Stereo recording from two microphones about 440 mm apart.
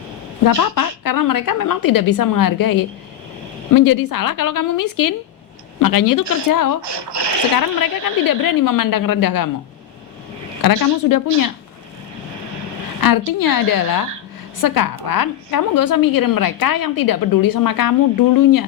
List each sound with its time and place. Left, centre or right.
0.4 s a woman's voice: left
6.8 s speech: right
7.5 s a woman's voice: left
10.6 s a woman's voice: left
13.0 s a woman's voice: left